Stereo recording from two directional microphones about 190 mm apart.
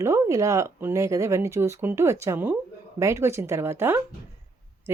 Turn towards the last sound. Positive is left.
turn(degrees=-15)  # may be behind; listen again after turning